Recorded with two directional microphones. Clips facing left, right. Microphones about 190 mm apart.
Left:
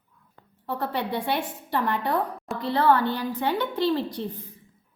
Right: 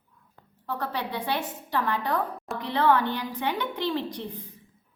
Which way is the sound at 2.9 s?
15° right (ahead or behind).